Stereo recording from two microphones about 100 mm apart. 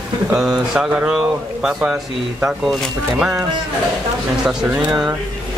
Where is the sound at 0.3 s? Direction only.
5° right (ahead or behind).